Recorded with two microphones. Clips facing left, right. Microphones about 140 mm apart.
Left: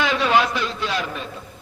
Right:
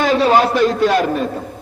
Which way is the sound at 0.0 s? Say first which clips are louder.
Right 6 dB; 40° right (ahead or behind).